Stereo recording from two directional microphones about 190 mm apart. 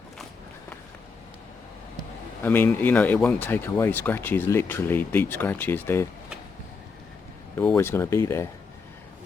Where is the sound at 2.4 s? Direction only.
10° left (ahead or behind).